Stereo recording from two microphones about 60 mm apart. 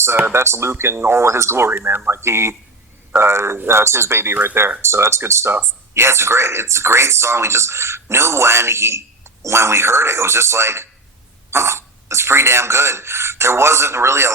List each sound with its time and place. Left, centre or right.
0.0 s speech: right
4.9 s speech: right